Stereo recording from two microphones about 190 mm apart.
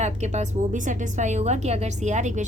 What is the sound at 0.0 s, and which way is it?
A woman's voice, 35° right (ahead or behind).